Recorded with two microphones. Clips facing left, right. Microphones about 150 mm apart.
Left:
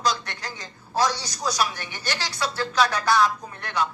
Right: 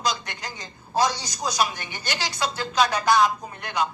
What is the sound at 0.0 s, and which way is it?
A man's voice, 15° right (ahead or behind).